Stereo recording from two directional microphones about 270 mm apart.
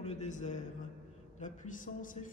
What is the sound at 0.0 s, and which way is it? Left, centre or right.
Speech, left.